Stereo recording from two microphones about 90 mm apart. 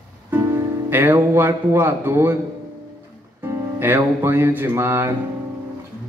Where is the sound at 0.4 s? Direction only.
25° right (ahead or behind).